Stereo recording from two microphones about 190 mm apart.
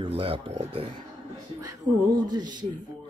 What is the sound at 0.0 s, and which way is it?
Speech, 30° right (ahead or behind).